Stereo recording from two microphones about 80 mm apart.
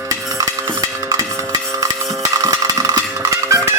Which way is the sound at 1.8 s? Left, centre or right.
Right.